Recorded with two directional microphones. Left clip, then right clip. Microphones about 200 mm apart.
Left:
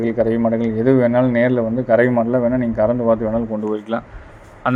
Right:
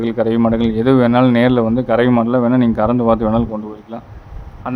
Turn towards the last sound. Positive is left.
turn(degrees=15)  # may be behind; listen again after turning